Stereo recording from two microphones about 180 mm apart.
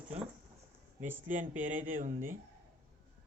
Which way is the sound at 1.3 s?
45° right (ahead or behind).